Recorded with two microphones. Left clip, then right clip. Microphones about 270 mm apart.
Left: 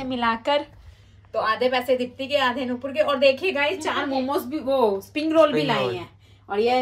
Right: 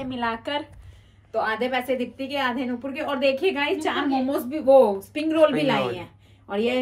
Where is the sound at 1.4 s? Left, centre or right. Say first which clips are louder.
Left 3 dB; centre.